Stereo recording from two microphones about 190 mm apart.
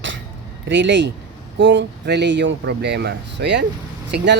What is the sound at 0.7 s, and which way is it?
Speech, 70° right (ahead or behind).